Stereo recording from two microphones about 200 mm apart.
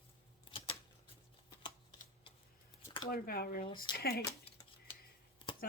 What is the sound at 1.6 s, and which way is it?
Typewriter, 25° left (ahead or behind).